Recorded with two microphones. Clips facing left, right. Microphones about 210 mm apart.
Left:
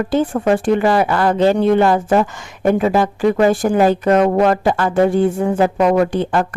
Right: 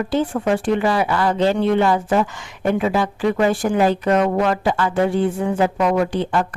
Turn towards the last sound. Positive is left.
turn(degrees=50)  # may be behind; listen again after turning